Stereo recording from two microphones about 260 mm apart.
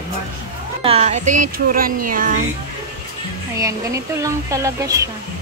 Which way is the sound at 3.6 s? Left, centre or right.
Centre.